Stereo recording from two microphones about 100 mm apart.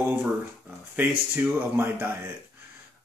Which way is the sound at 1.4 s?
20° right (ahead or behind).